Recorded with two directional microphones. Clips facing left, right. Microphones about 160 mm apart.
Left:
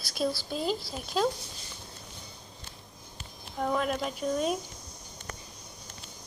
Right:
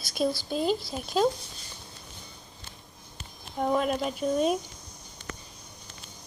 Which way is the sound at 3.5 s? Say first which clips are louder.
Right 3 dB; 20° right (ahead or behind).